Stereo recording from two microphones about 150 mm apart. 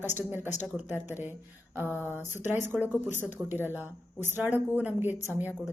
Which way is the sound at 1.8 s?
15° left (ahead or behind).